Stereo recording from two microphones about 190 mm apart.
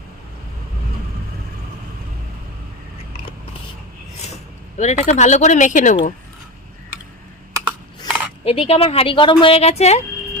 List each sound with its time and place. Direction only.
4.8 s a woman's voice: 40° left (ahead or behind)
7.6 s a sound: 5° right (ahead or behind)
8.4 s a woman's voice: 30° left (ahead or behind)